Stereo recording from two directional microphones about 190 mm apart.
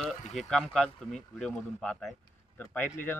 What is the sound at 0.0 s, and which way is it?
Speech, centre (ahead or behind).